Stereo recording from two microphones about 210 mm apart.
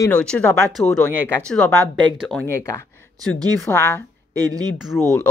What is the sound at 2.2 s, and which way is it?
Speech, 10° left (ahead or behind).